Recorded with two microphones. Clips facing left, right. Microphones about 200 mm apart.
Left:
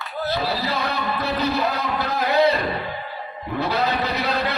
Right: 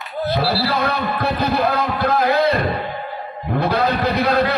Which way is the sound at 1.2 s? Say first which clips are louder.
Right 4 dB; 55° right (ahead or behind).